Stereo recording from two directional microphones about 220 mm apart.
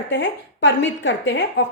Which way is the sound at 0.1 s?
55° left (ahead or behind).